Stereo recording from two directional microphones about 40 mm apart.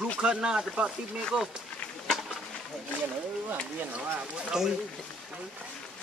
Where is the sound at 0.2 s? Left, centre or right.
Right.